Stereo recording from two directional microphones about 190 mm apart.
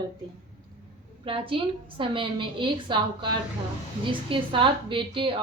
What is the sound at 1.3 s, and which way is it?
Speech, 30° right (ahead or behind).